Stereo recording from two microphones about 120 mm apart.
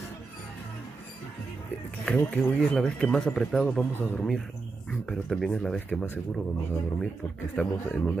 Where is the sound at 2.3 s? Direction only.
10° left (ahead or behind).